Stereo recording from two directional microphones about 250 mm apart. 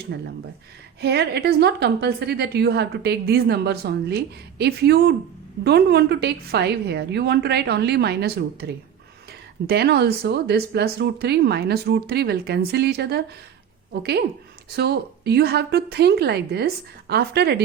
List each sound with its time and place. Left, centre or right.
0.1 s a woman's voice: right